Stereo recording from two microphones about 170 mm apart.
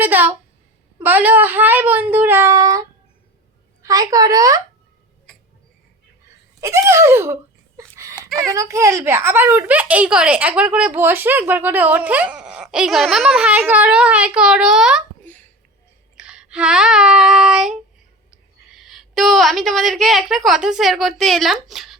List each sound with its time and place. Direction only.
0.0 s a child's voice: 10° right (ahead or behind)
3.8 s speech: 20° right (ahead or behind)
6.6 s a child's voice: 20° right (ahead or behind)
7.8 s a sound: 20° right (ahead or behind)
8.4 s a child's voice: 20° right (ahead or behind)
16.1 s child singing: 5° right (ahead or behind)
18.8 s a woman's voice: centre (ahead or behind)